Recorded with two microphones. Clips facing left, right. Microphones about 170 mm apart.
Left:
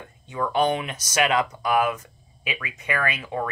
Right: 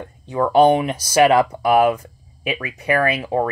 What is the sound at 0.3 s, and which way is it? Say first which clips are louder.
Speech: right 9 dB; 35° right (ahead or behind).